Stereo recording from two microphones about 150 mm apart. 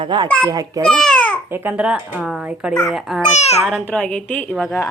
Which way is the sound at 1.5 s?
15° right (ahead or behind).